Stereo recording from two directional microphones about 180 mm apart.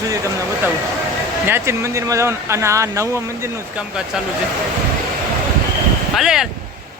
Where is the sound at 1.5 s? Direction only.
15° right (ahead or behind).